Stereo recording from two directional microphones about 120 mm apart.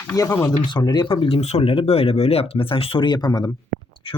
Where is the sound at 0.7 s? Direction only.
35° left (ahead or behind).